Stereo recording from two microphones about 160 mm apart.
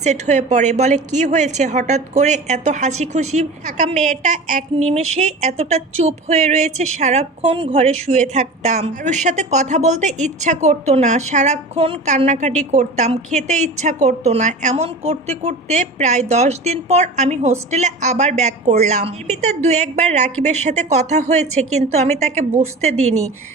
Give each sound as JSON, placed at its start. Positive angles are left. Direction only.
{"t": 0.0, "sound": "a woman's voice", "side_deg": -45}